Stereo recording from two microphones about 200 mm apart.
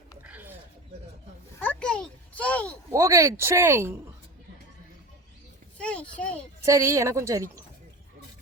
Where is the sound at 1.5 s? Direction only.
5° left (ahead or behind).